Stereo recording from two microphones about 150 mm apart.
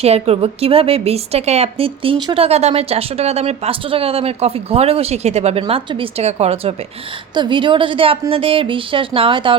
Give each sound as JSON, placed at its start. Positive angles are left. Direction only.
{"t": 0.0, "sound": "a woman's voice", "side_deg": -45}
{"t": 7.3, "sound": "a woman's voice", "side_deg": -30}